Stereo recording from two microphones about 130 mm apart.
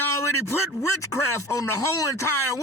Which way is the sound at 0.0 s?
20° left (ahead or behind).